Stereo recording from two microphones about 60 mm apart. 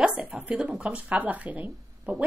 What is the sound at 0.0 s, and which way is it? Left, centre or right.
Speech, right.